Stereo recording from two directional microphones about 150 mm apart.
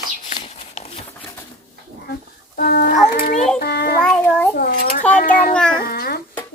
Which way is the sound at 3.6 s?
90° left.